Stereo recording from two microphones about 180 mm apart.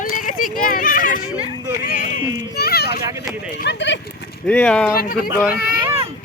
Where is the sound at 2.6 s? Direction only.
60° left (ahead or behind).